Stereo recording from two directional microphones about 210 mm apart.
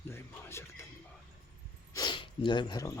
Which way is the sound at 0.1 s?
10° left (ahead or behind).